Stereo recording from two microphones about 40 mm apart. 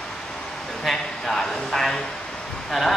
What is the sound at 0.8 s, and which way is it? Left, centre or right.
A man's voice, centre.